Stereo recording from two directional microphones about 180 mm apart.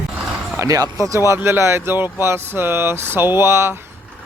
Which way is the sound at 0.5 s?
20° right (ahead or behind).